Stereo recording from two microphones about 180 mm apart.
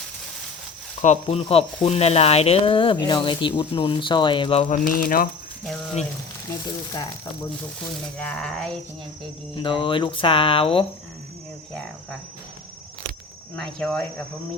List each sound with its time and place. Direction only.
1.0 s speech: 40° left (ahead or behind)
4.7 s speech: 50° left (ahead or behind)
6.7 s speech: 20° left (ahead or behind)
8.2 s speech: 5° left (ahead or behind)
9.6 s speech: 25° left (ahead or behind)
13.6 s speech: 5° left (ahead or behind)